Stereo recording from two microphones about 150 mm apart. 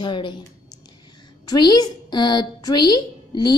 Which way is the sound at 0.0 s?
30° left (ahead or behind).